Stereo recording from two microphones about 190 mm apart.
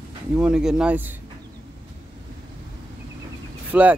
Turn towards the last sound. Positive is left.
turn(degrees=-10)  # may be behind; listen again after turning